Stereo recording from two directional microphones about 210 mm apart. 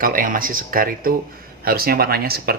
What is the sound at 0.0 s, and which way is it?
Speech, 40° right (ahead or behind).